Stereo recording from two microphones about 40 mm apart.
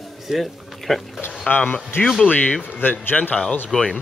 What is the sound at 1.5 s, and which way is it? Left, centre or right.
Speech, left.